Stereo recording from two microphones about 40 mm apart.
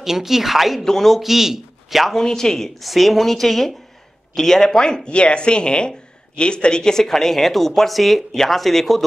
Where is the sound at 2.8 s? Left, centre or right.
Centre.